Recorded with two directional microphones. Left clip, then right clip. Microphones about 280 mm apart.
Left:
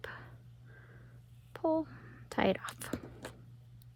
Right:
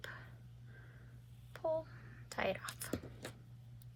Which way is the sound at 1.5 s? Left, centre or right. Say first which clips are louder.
Left 6 dB; left.